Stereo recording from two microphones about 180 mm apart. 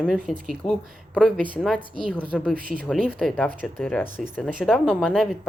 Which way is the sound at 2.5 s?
50° right (ahead or behind).